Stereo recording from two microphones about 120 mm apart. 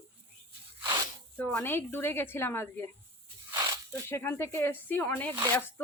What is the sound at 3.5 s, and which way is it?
Snake, 35° right (ahead or behind).